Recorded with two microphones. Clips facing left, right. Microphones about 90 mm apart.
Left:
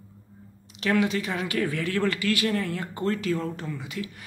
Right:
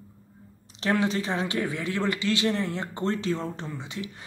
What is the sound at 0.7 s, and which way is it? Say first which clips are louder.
Speech: left 1 dB; 30° right (ahead or behind).